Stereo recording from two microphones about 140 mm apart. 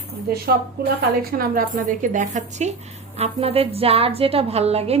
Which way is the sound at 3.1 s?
45° right (ahead or behind).